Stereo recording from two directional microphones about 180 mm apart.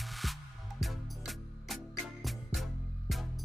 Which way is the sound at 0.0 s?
Centre (ahead or behind).